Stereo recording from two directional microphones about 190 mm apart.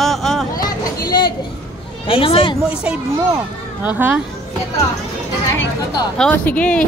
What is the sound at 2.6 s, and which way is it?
Speech, 5° right (ahead or behind).